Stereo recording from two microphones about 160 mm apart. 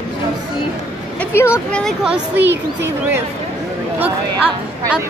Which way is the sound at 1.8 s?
5° right (ahead or behind).